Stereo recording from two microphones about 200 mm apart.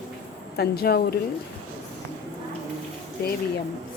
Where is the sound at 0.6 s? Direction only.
50° left (ahead or behind).